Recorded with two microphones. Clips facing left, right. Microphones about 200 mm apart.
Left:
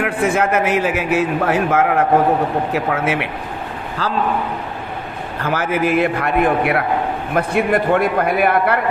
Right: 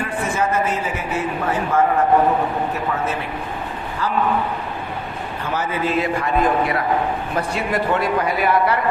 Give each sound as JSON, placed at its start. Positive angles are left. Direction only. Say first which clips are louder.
{"t": 0.0, "sound": "a man's voice", "louder": "left 5 dB", "side_deg": 75}
{"t": 5.4, "sound": "a man's voice", "louder": "left 5 dB", "side_deg": 90}
{"t": 7.3, "sound": "a man's voice", "louder": "left 7 dB", "side_deg": 55}